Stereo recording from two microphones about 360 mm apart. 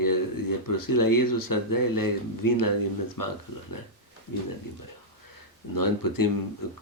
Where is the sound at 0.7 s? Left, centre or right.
Left.